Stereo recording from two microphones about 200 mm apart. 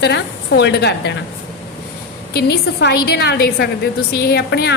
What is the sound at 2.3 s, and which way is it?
A woman's voice, 55° left (ahead or behind).